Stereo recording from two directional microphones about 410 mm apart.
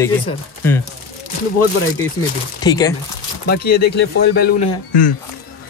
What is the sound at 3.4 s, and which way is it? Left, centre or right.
Speech, left.